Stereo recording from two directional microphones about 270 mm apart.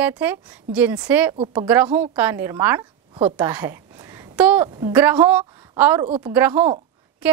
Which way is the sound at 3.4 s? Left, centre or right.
Centre.